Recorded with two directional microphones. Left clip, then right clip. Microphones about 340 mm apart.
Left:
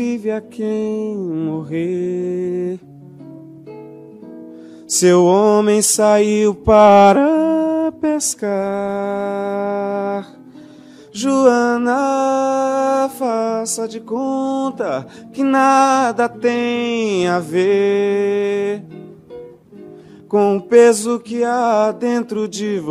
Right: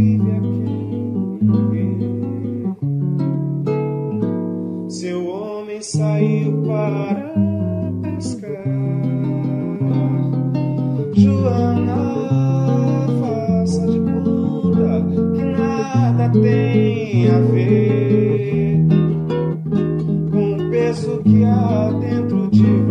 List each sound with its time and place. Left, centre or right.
0.0 s music: left
5.0 s music: left
11.1 s music: left
15.6 s music: left
20.3 s music: left